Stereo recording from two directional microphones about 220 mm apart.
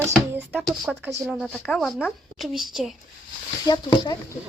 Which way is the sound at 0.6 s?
Centre (ahead or behind).